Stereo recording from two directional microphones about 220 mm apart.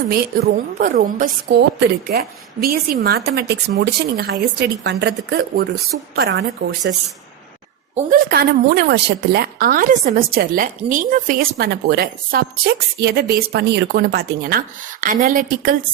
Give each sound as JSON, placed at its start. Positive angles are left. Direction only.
{"t": 0.1, "sound": "a woman's voice", "side_deg": -40}
{"t": 7.9, "sound": "a woman's voice", "side_deg": -40}
{"t": 15.0, "sound": "a woman's voice", "side_deg": -40}